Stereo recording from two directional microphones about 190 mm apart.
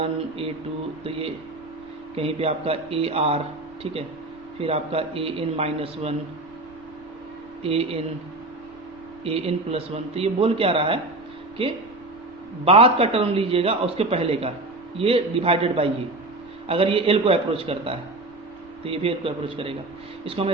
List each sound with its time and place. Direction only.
0.0 s a man's voice: 30° right (ahead or behind)
2.1 s a man's voice: 30° right (ahead or behind)
4.6 s a man's voice: 30° right (ahead or behind)
7.6 s a man's voice: 30° right (ahead or behind)
9.2 s a man's voice: 30° right (ahead or behind)
12.6 s a man's voice: 30° right (ahead or behind)